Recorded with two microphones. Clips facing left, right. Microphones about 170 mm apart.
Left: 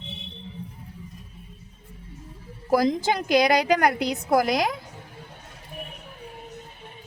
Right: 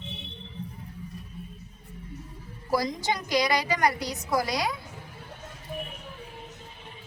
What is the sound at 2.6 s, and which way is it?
A woman's voice, 55° left (ahead or behind).